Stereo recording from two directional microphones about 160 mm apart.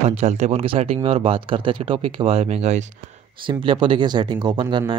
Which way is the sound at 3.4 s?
30° right (ahead or behind).